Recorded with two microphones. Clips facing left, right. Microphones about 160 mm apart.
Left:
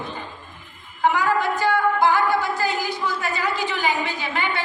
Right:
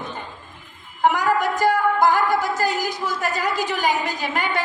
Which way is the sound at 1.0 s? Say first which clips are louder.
Right 1 dB; 45° right (ahead or behind).